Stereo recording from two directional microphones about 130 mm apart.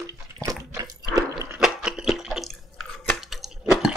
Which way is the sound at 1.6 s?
5° right (ahead or behind).